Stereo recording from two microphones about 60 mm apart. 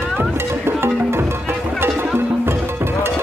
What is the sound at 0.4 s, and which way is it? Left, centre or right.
Music, right.